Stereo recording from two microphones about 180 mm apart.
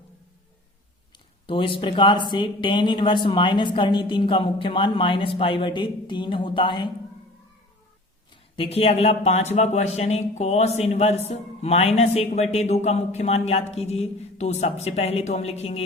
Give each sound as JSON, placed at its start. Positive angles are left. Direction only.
{"t": 1.5, "sound": "speech", "side_deg": 30}
{"t": 8.5, "sound": "speech", "side_deg": 30}